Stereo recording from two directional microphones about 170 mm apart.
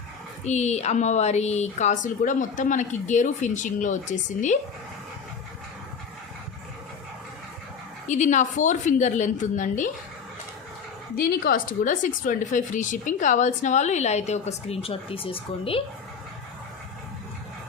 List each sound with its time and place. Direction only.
0.4 s a woman's voice: 40° left (ahead or behind)
8.0 s a woman's voice: 45° left (ahead or behind)
11.2 s a woman's voice: 55° left (ahead or behind); by 15.8 s 30° left (ahead or behind)